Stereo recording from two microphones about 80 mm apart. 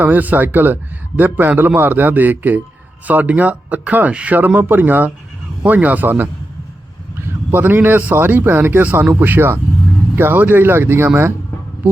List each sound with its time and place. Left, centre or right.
0.0 s a man's voice: right
7.5 s a man's voice: right